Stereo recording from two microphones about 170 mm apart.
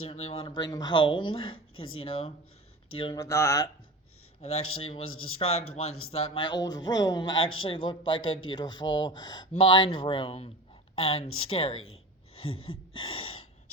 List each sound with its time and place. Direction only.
0.0 s a man's voice: 35° left (ahead or behind); by 3.7 s 15° left (ahead or behind)
4.4 s a man's voice: 40° left (ahead or behind)
12.3 s a sound: 35° left (ahead or behind)